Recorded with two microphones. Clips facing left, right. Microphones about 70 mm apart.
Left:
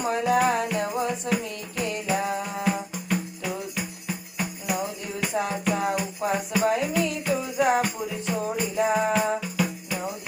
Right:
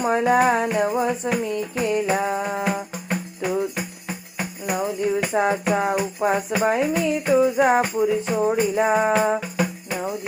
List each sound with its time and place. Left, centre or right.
0.3 s music: right
1.2 s speech: right
1.9 s music: right